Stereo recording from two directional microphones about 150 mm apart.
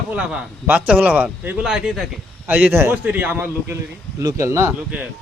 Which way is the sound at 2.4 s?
10° right (ahead or behind).